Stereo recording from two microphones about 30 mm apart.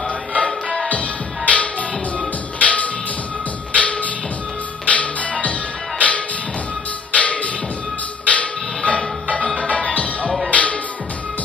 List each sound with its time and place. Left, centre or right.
0.8 s music: left